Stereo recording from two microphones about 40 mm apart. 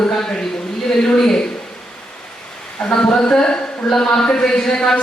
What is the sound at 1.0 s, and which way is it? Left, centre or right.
Speech, centre.